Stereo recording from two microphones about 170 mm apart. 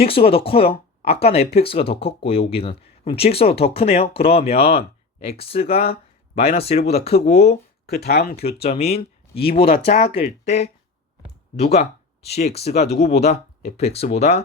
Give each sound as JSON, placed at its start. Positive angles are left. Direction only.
{"t": 0.0, "sound": "speech", "side_deg": 35}
{"t": 7.9, "sound": "speech", "side_deg": 70}
{"t": 8.4, "sound": "speech", "side_deg": 35}